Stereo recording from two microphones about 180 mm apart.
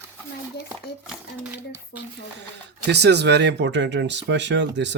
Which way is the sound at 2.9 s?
70° right (ahead or behind).